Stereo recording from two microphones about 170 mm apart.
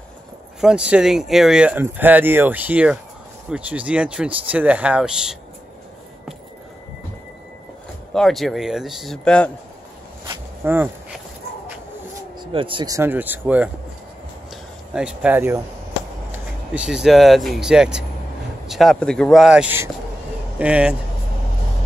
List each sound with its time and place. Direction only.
0.6 s speech: 5° right (ahead or behind)
8.1 s a man's voice: centre (ahead or behind)
10.6 s speech: 10° right (ahead or behind)
12.4 s speech: 30° right (ahead or behind); by 13.7 s 10° right (ahead or behind)
15.0 s a man's voice: 5° right (ahead or behind)